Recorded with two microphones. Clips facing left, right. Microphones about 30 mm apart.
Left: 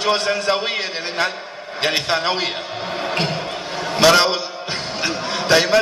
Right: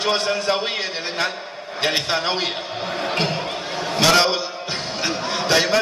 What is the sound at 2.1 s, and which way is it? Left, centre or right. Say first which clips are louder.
Speech: left 2 dB; left.